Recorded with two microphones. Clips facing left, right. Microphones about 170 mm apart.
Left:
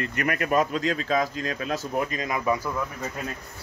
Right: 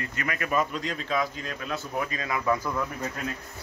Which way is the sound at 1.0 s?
45° left (ahead or behind).